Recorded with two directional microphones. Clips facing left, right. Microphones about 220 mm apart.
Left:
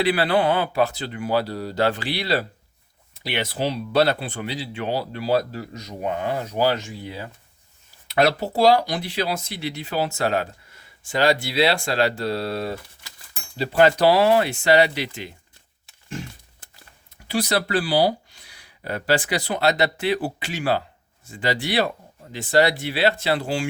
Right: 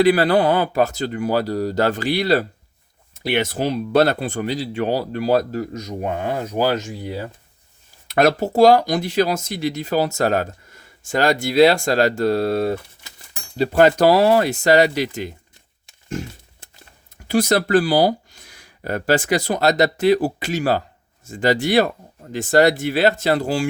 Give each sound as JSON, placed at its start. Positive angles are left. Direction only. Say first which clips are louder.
{"t": 0.0, "sound": "speech", "louder": "right 5 dB", "side_deg": -45}
{"t": 12.7, "sound": "a sound", "louder": "right 7 dB", "side_deg": -20}
{"t": 13.6, "sound": "speech", "louder": "right 3 dB", "side_deg": -45}
{"t": 17.2, "sound": "speech", "louder": "right 5 dB", "side_deg": -45}